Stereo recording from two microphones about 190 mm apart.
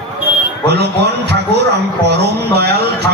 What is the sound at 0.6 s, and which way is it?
A man's voice, 60° right (ahead or behind).